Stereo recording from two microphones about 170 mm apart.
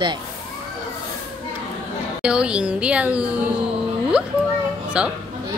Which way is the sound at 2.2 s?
5° right (ahead or behind).